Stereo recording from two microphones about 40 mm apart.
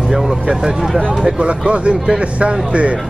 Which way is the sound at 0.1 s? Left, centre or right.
Centre.